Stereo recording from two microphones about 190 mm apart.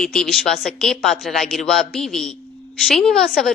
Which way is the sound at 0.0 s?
Centre (ahead or behind).